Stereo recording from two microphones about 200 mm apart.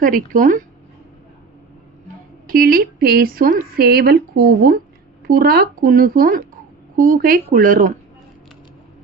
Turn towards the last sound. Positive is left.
turn(degrees=-45)  # may be behind; listen again after turning